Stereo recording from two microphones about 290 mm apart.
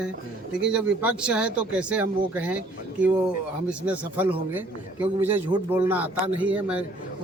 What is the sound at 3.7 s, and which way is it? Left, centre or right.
A man's voice, centre.